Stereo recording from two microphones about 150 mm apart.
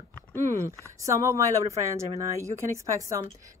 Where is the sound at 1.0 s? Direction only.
20° right (ahead or behind).